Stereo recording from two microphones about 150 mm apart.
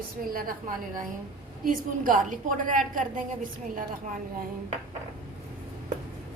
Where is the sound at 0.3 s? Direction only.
75° right (ahead or behind).